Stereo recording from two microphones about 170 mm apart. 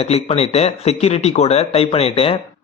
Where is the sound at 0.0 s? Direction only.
40° left (ahead or behind).